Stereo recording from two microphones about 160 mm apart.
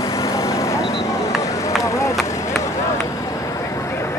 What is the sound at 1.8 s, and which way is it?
Run, 20° left (ahead or behind).